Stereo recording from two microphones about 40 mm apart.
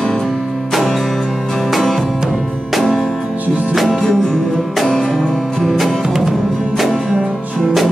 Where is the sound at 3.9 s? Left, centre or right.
Centre.